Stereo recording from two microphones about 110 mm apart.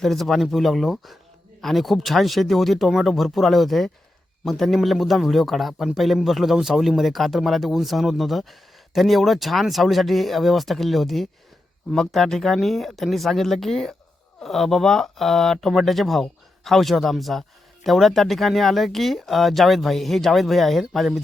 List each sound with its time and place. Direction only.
0.0 s a man's voice: centre (ahead or behind)